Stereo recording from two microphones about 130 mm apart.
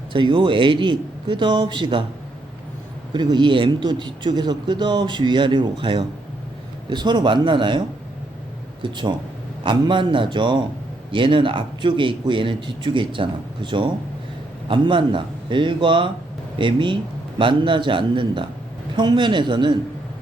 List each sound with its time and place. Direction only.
0.1 s speech: 40° right (ahead or behind)
3.1 s speech: 35° right (ahead or behind)
8.8 s speech: 35° right (ahead or behind)